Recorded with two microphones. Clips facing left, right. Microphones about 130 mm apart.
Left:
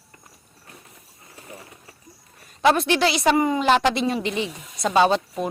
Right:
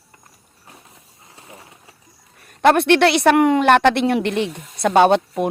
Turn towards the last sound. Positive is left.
turn(degrees=-60)  # may be behind; listen again after turning